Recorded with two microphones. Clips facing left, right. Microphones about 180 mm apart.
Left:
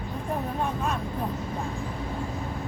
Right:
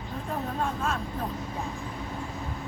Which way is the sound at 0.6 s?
15° left (ahead or behind).